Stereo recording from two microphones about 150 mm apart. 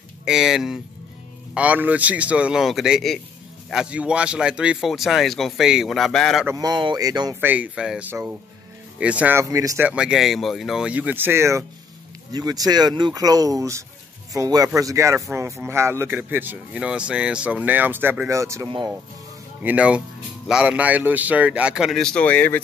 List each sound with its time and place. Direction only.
0.2 s speech: 5° right (ahead or behind)
6.4 s speech: 25° right (ahead or behind)
7.3 s speech: 10° right (ahead or behind)
9.8 s speech: 5° right (ahead or behind); by 22.6 s 10° left (ahead or behind)